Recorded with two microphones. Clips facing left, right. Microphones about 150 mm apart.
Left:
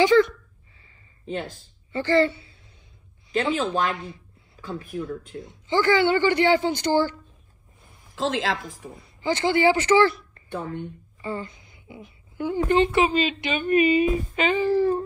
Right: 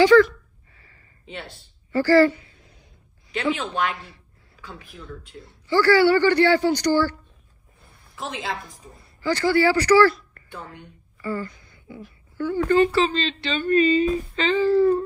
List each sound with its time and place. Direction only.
0.0 s a man's voice: 20° left (ahead or behind)
1.2 s speech: 40° left (ahead or behind)
2.0 s a man's voice: 25° left (ahead or behind)
3.3 s speech: 40° left (ahead or behind)
5.4 s a man's voice: 20° left (ahead or behind)
8.2 s a woman's voice: 90° left
9.2 s speech: 20° left (ahead or behind)
11.1 s a sound: 25° left (ahead or behind)
12.4 s a woman's voice: 15° left (ahead or behind)